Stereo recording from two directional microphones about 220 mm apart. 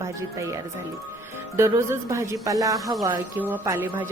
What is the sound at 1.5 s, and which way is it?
A woman's voice, 10° right (ahead or behind).